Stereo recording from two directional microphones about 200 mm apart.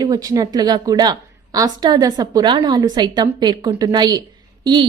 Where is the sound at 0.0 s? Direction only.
20° right (ahead or behind).